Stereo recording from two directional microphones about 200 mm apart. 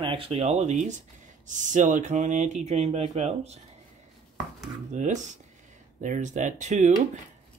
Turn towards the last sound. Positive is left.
turn(degrees=-35)  # may be behind; listen again after turning